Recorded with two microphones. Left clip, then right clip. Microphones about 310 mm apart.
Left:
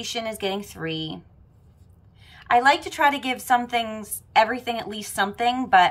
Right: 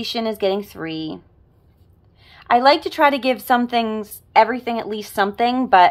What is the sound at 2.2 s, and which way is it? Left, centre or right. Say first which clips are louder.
A woman's voice: right 4 dB; centre.